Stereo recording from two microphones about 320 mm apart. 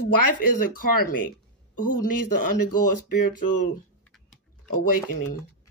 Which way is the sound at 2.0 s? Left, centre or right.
Left.